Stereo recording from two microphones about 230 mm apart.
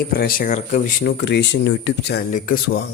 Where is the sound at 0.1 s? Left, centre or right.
Left.